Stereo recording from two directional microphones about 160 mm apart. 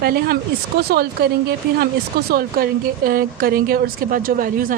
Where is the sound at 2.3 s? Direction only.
70° right (ahead or behind).